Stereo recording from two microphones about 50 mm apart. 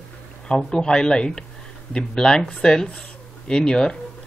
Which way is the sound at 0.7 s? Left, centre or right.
Centre.